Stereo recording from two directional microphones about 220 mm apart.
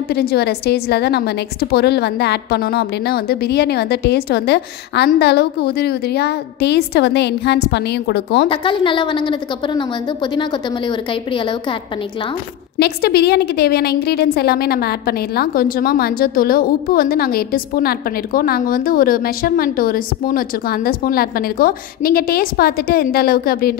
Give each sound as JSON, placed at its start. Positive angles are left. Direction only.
{"t": 0.1, "sound": "a woman's voice", "side_deg": 45}
{"t": 8.5, "sound": "a woman's voice", "side_deg": 25}
{"t": 12.7, "sound": "a woman's voice", "side_deg": 45}